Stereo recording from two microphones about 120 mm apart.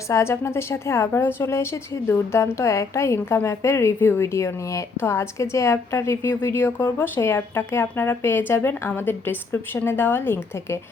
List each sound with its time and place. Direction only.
0.1 s a woman's voice: 20° left (ahead or behind)